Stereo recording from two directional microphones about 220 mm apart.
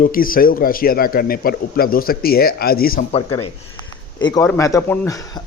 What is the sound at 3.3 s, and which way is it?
Speech, 90° left.